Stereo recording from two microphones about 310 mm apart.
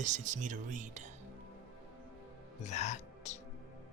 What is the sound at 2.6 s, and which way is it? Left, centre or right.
Speech, left.